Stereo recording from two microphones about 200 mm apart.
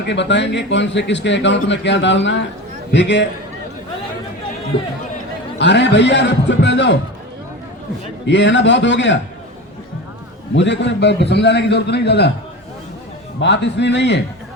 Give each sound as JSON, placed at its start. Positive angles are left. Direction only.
{"t": 0.0, "sound": "a man's voice", "side_deg": 60}
{"t": 5.5, "sound": "a man's voice", "side_deg": 60}
{"t": 8.3, "sound": "a man's voice", "side_deg": 60}
{"t": 10.5, "sound": "a man's voice", "side_deg": 60}
{"t": 13.4, "sound": "a man's voice", "side_deg": 60}